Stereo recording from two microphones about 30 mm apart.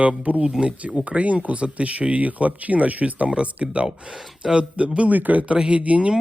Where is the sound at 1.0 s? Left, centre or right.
Right.